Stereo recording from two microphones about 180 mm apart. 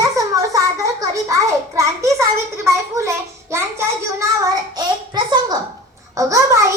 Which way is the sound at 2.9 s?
15° right (ahead or behind).